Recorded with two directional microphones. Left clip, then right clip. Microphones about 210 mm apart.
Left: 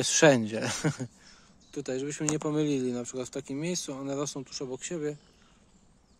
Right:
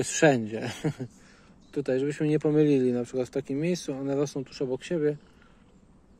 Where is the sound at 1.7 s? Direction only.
5° left (ahead or behind).